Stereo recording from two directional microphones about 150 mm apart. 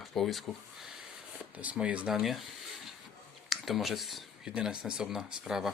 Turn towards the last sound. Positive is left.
turn(degrees=-5)  # may be behind; listen again after turning